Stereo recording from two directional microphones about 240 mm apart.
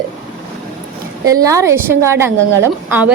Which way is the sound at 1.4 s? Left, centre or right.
Centre.